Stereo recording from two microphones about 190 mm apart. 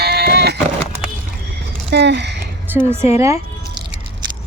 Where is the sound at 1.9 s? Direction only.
65° right (ahead or behind).